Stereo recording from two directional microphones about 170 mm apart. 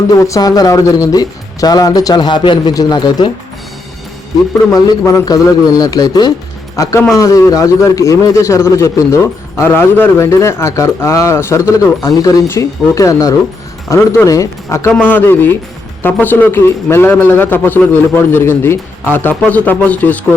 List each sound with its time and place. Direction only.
0.2 s speech: 20° left (ahead or behind)
4.7 s speech: 20° left (ahead or behind)